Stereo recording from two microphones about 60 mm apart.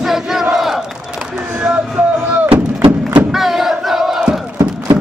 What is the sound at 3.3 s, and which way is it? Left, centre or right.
Battle cry, centre.